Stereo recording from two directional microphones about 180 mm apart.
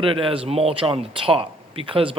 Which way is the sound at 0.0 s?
30° right (ahead or behind).